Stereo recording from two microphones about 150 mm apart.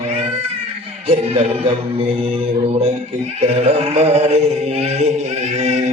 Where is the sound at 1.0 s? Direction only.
40° right (ahead or behind).